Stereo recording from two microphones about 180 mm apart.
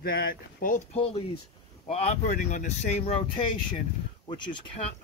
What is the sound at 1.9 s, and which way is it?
Speech, 35° left (ahead or behind).